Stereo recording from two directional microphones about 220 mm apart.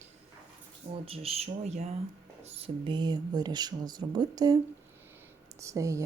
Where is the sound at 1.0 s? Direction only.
25° right (ahead or behind).